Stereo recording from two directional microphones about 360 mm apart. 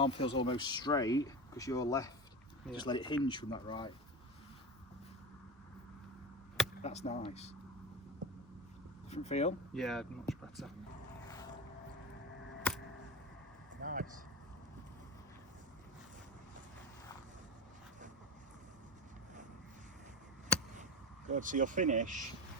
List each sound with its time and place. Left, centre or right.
0.0 s speech: centre
6.8 s speech: centre
9.0 s speech: centre
9.7 s speech: centre
13.8 s vehicle: right
21.2 s speech: right